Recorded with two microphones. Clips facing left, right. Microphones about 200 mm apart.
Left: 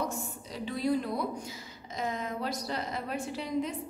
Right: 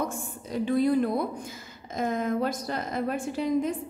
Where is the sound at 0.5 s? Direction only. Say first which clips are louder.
Right 7 dB; 50° right (ahead or behind).